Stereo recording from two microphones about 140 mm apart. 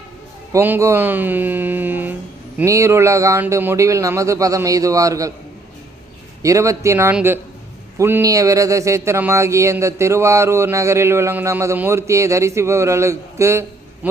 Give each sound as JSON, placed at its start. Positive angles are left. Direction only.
{"t": 0.5, "sound": "speech", "side_deg": -15}
{"t": 6.4, "sound": "speech", "side_deg": -20}